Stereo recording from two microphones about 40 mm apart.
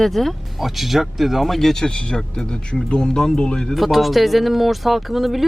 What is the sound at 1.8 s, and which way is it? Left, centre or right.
Speech, left.